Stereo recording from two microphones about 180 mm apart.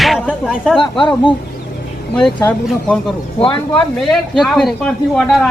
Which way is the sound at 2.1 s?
5° left (ahead or behind).